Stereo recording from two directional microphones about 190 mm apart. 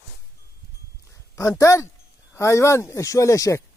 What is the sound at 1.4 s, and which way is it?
Speech, 15° left (ahead or behind).